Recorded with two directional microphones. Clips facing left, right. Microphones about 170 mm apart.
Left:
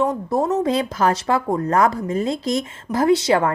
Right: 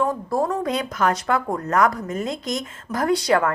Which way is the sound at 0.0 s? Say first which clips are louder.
Left 2 dB; 20° left (ahead or behind).